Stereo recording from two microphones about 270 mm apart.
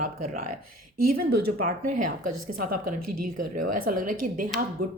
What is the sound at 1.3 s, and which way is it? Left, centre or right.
Speech, right.